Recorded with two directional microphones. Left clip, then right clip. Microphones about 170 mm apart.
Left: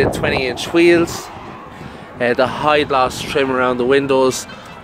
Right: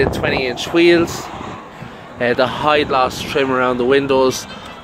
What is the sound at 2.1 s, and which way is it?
Speech, 10° left (ahead or behind).